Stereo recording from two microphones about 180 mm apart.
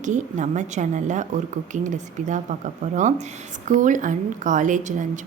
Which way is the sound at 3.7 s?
45° right (ahead or behind).